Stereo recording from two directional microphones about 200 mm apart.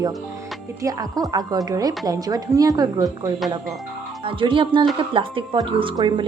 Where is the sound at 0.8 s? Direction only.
15° right (ahead or behind).